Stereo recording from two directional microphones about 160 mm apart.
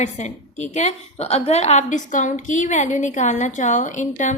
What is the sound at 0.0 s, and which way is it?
A woman's voice, 45° left (ahead or behind).